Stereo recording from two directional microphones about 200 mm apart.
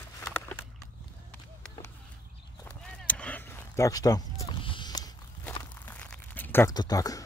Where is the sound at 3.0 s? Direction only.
5° left (ahead or behind).